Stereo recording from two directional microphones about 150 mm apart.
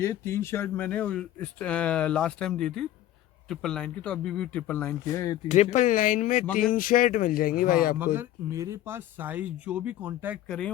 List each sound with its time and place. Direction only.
0.0 s speech: 20° left (ahead or behind)
5.0 s speech: 20° left (ahead or behind)
5.5 s speech: 55° left (ahead or behind)
7.9 s speech: 15° right (ahead or behind)